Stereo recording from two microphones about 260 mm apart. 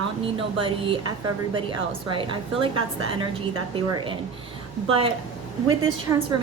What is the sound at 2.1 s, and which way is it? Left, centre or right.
Speech, centre.